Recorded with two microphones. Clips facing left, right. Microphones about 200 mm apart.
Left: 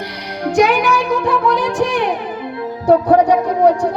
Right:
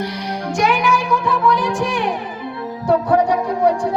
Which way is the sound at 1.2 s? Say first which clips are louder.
Left 2 dB; 65° left (ahead or behind).